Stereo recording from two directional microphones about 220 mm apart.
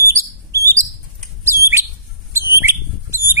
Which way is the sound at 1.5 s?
40° right (ahead or behind).